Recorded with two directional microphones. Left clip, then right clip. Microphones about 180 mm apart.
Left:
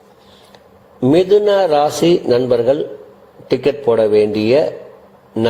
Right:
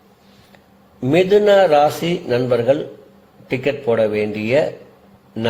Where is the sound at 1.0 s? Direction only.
10° left (ahead or behind).